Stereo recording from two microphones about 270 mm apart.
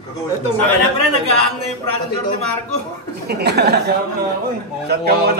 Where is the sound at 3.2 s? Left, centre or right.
Right.